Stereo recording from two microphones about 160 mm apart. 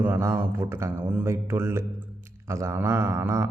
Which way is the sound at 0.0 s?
15° right (ahead or behind).